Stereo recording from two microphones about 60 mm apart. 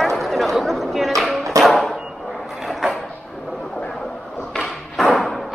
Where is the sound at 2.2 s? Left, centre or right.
Centre.